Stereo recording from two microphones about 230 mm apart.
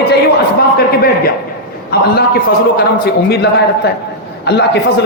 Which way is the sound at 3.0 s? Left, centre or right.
Left.